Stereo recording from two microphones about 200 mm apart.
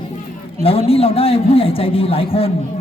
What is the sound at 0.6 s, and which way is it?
Speech, 30° left (ahead or behind).